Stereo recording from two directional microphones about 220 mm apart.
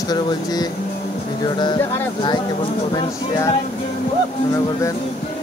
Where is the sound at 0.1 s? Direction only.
20° left (ahead or behind).